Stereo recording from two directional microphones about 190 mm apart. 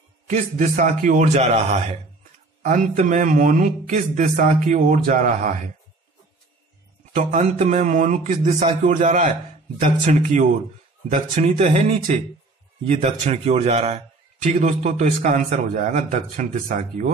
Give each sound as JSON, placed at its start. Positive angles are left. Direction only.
{"t": 0.3, "sound": "a man's voice", "side_deg": -40}
{"t": 7.2, "sound": "a man's voice", "side_deg": -40}